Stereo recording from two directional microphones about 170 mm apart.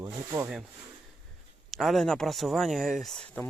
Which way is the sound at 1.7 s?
Centre (ahead or behind).